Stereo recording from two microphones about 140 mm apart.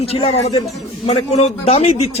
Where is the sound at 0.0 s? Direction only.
45° left (ahead or behind).